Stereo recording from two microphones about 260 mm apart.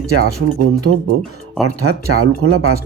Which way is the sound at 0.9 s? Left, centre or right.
Right.